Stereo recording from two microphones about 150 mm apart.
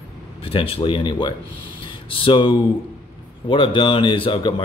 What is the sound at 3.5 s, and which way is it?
Speech, 35° left (ahead or behind).